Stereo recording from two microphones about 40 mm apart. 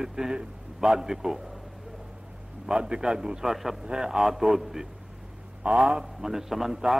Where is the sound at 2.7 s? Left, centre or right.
Centre.